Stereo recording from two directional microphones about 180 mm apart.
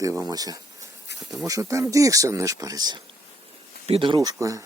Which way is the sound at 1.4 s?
15° right (ahead or behind).